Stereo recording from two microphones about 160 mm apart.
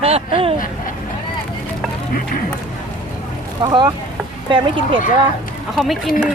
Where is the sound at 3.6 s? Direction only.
25° right (ahead or behind).